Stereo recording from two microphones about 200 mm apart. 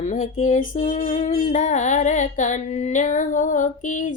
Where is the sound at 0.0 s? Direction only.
40° left (ahead or behind).